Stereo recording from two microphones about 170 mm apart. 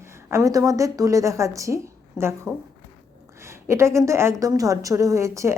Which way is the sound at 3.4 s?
15° right (ahead or behind).